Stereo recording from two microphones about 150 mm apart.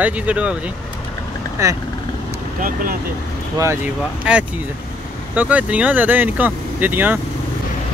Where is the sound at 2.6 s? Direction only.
65° right (ahead or behind).